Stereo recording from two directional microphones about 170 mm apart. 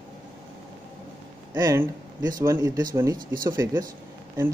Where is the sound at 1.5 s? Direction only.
20° right (ahead or behind).